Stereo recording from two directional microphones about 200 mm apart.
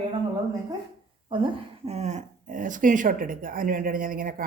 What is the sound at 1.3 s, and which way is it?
Speech, 30° right (ahead or behind).